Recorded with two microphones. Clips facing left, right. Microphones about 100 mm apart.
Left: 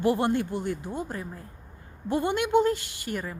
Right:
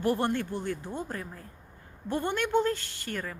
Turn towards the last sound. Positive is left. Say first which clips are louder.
# left 3 dB
turn(degrees=10)  # may be behind; listen again after turning